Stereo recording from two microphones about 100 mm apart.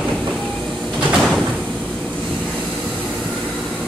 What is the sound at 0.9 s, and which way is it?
Sliding door, 5° right (ahead or behind).